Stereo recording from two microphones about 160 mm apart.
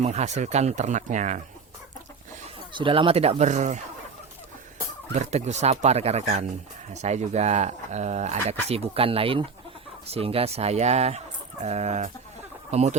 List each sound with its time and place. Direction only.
0.0 s speech: 45° right (ahead or behind)
2.7 s speech: 30° right (ahead or behind); by 3.8 s 45° right (ahead or behind)
5.1 s speech: 45° right (ahead or behind)